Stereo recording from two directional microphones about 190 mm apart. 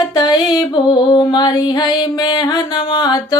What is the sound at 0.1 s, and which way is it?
Music, 20° left (ahead or behind).